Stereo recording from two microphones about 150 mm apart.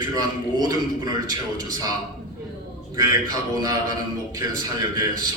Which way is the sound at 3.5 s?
25° right (ahead or behind).